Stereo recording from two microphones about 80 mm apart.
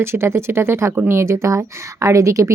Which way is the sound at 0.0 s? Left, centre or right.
Right.